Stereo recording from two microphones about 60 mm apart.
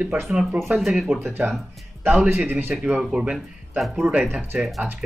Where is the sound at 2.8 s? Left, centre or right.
Centre.